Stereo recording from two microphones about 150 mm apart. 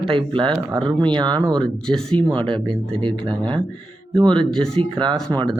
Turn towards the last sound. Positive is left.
turn(degrees=-30)  # may be behind; listen again after turning